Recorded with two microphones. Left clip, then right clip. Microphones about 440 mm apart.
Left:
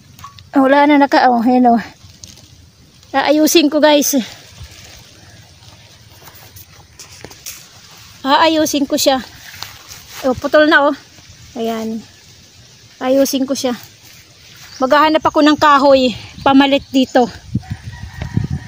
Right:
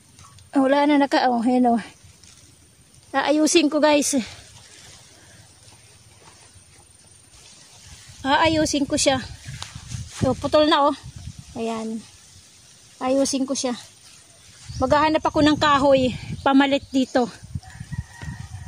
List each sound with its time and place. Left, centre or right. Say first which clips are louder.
0.5 s speech: left 8 dB; right
3.1 s speech: left 7 dB; right
8.2 s speech: left 7 dB; right
13.0 s speech: left 8 dB; right
14.8 s speech: left 7 dB; right